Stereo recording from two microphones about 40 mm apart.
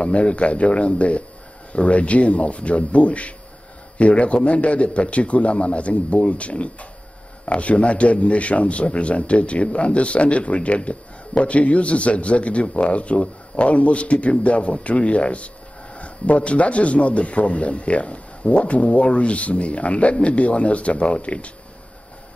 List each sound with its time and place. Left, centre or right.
0.0 s speech: left